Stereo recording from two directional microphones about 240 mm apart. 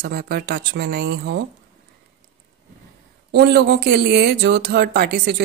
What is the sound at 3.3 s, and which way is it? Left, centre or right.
Speech, right.